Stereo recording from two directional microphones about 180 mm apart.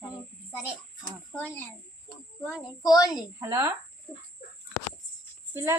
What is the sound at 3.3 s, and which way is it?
Speech, 15° right (ahead or behind).